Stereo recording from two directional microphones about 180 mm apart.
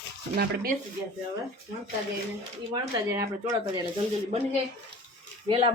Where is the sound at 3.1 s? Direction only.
20° right (ahead or behind).